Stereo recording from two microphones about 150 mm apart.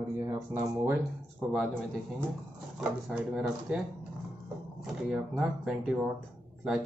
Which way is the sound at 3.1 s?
10° right (ahead or behind).